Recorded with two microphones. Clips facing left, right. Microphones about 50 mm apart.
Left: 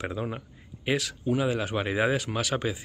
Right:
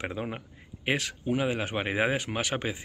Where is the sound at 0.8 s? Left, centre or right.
Right.